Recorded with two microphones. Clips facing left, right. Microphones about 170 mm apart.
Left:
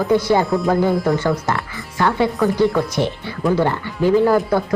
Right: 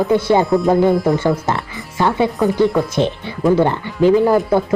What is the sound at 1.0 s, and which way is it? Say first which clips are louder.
A woman's voice: right 2 dB; 25° right (ahead or behind).